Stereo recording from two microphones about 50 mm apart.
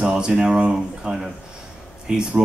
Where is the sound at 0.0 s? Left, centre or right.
Centre.